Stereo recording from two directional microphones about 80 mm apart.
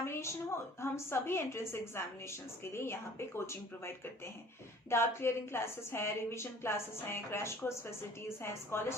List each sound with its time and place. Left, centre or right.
0.0 s a woman's voice: left